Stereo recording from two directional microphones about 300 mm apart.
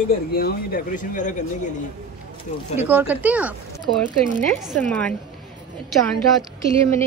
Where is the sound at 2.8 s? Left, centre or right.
Centre.